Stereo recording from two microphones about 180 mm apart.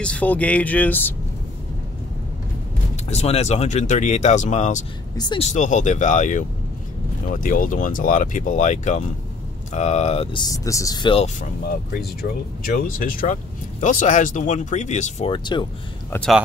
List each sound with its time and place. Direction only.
0.0 s speech: 5° left (ahead or behind)
3.1 s speech: 35° left (ahead or behind)
5.1 s speech: 25° left (ahead or behind)
5.4 s speech: 40° left (ahead or behind); by 11.2 s 25° left (ahead or behind)
11.9 s speech: 55° left (ahead or behind); by 15.3 s 40° left (ahead or behind)
15.3 s speech: 25° left (ahead or behind)